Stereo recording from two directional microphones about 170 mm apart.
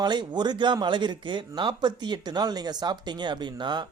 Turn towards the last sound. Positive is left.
turn(degrees=-25)  # may be behind; listen again after turning